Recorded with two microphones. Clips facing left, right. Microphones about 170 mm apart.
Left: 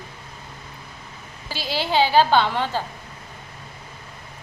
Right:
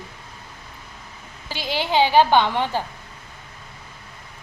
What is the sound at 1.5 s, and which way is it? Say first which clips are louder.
A woman's voice: right 1 dB; 15° right (ahead or behind).